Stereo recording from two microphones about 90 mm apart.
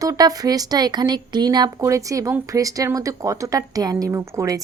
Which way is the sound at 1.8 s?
35° right (ahead or behind).